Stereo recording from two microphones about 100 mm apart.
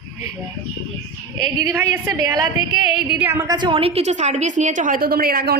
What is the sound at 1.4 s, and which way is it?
A woman's voice, 40° right (ahead or behind).